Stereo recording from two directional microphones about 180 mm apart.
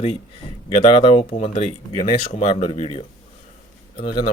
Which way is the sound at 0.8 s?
30° left (ahead or behind).